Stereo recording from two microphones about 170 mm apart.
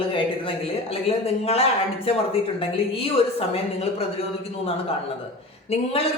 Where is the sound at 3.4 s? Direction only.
35° left (ahead or behind).